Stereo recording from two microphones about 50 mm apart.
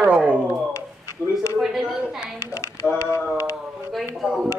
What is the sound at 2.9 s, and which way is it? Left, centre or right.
Speech, left.